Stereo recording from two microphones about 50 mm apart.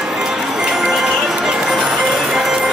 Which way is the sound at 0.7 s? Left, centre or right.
Centre.